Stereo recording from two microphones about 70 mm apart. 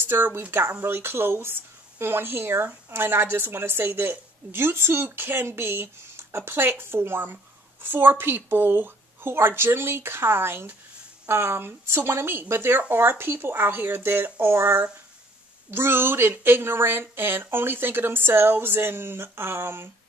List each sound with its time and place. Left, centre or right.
0.0 s speech: right